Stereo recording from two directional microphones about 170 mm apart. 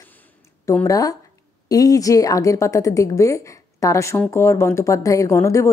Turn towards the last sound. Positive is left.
turn(degrees=15)  # may be behind; listen again after turning